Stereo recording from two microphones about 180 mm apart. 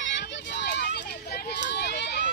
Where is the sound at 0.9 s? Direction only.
65° left (ahead or behind).